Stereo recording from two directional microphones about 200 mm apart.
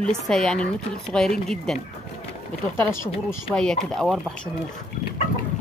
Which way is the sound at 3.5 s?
5° left (ahead or behind).